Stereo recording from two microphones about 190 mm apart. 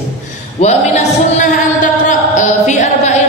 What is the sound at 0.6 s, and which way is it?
A man's voice, 35° left (ahead or behind).